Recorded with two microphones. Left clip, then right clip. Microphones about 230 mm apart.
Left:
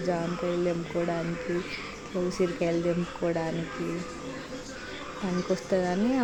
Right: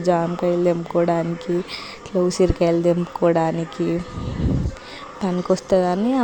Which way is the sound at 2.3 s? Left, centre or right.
Right.